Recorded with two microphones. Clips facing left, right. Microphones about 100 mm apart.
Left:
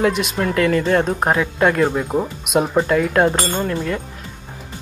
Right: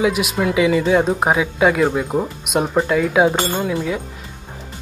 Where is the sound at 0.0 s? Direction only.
5° right (ahead or behind).